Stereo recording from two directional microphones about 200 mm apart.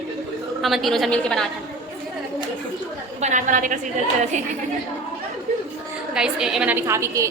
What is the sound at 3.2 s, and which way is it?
Speech, 35° right (ahead or behind).